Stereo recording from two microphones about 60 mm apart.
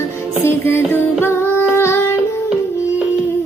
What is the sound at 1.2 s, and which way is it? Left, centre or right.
Female singing, left.